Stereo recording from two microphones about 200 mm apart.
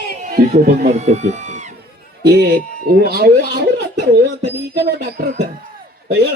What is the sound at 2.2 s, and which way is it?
Speech, 55° right (ahead or behind).